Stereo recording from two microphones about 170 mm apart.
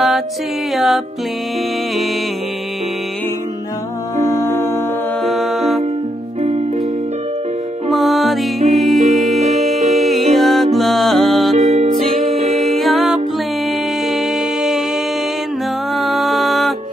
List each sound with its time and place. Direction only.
0.7 s music: centre (ahead or behind)
4.2 s music: 15° left (ahead or behind)
5.2 s music: centre (ahead or behind)
7.9 s music: centre (ahead or behind)
11.5 s music: 40° right (ahead or behind)
12.1 s music: centre (ahead or behind)
15.9 s music: centre (ahead or behind)